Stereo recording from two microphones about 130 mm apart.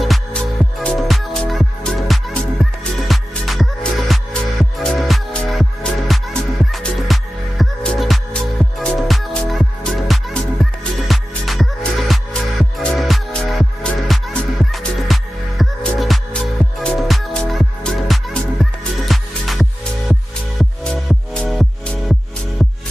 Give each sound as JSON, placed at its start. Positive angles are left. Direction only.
{"t": 0.0, "sound": "music", "side_deg": 0}